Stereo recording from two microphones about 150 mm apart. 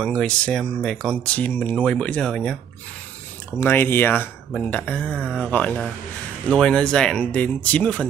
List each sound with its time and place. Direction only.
0.0 s speech: 5° left (ahead or behind)
3.5 s speech: 15° left (ahead or behind)
5.1 s speech: 10° right (ahead or behind)
5.4 s speech: 10° left (ahead or behind)